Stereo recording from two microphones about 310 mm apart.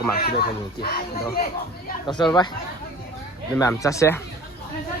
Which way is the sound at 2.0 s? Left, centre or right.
Centre.